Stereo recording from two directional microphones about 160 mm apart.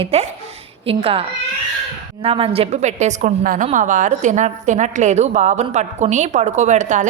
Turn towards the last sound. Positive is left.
turn(degrees=-50)  # may be behind; listen again after turning